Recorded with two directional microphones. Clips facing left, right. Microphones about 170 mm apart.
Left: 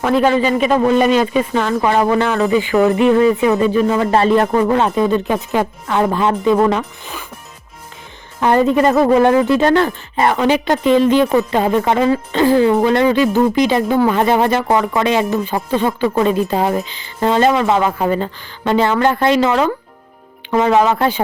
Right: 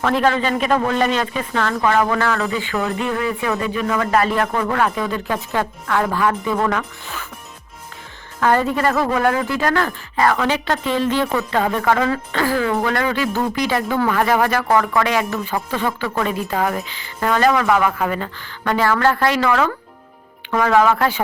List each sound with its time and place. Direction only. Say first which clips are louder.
0.0 s a woman's voice: left 4 dB; 10° left (ahead or behind)
8.4 s a woman's voice: left 5 dB; 20° left (ahead or behind)